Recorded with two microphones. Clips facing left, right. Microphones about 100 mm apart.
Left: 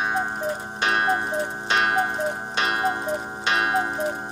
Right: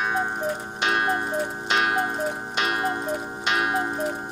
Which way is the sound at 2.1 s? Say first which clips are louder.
Left 1 dB; 25° left (ahead or behind).